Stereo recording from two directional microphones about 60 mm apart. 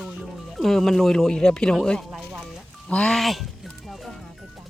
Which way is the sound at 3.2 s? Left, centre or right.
Centre.